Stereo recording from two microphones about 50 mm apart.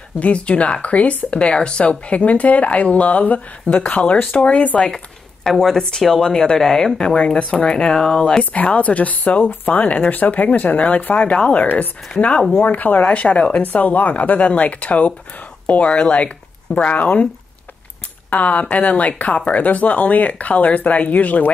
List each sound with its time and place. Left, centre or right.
0.2 s speech: left
4.7 s speech: centre
7.2 s speech: left
8.5 s speech: left
11.2 s speech: left
18.3 s speech: left